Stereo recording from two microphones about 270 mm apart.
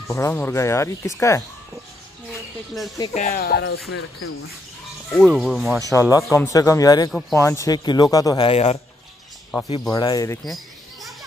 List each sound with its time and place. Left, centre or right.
0.1 s a man's voice: centre
3.2 s speech: left
5.1 s speech: centre
5.8 s a man's voice: centre
7.1 s a man's voice: centre